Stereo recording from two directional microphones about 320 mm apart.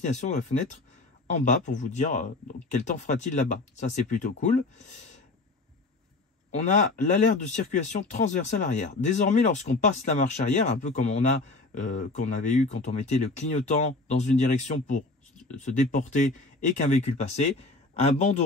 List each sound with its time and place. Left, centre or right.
0.0 s speech: left
6.6 s speech: left